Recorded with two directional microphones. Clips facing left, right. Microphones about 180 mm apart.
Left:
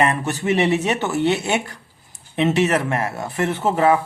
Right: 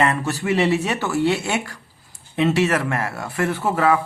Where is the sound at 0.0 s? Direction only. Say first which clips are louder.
Left 1 dB; 20° left (ahead or behind).